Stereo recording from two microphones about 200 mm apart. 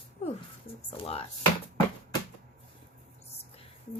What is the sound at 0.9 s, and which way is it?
Music, 30° left (ahead or behind).